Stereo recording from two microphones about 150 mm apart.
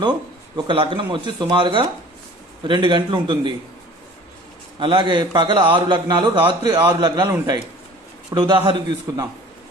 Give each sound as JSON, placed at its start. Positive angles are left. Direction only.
{"t": 0.5, "sound": "a man's voice", "side_deg": -35}
{"t": 4.8, "sound": "a man's voice", "side_deg": -35}
{"t": 9.1, "sound": "a man's voice", "side_deg": -20}